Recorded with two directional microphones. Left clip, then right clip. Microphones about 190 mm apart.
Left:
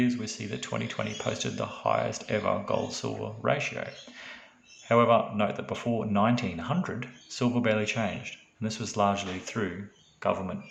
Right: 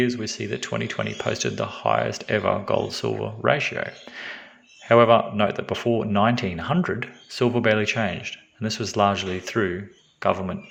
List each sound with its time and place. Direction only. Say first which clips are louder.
0.0 s speech: right 6 dB; 25° right (ahead or behind)